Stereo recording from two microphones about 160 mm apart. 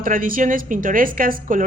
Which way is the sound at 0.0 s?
60° right (ahead or behind).